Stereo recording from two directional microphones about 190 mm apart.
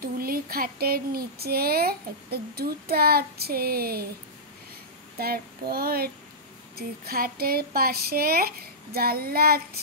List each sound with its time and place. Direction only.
0.0 s speech: 50° right (ahead or behind)
5.2 s speech: 55° right (ahead or behind)